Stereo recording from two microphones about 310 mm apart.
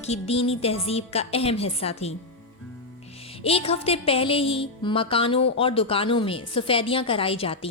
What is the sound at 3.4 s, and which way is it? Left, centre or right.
A woman's voice, centre.